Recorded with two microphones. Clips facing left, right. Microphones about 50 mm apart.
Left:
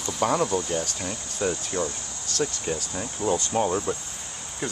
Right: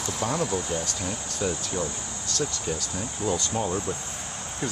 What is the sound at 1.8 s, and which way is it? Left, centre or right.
Speech, centre.